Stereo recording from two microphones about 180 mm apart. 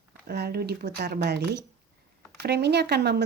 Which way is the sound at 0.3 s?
60° right (ahead or behind).